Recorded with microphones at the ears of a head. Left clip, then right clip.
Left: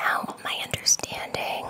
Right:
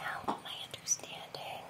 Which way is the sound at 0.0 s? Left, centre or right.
Left.